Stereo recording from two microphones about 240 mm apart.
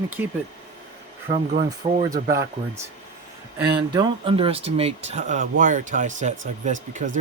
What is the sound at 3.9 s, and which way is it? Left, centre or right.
Speech, right.